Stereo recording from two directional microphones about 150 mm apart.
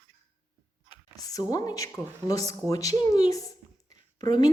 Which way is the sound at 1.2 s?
25° left (ahead or behind).